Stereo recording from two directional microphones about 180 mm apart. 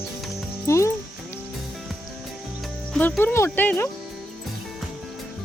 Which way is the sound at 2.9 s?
5° left (ahead or behind).